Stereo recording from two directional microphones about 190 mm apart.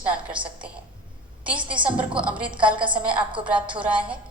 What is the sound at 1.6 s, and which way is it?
Speech, 25° right (ahead or behind).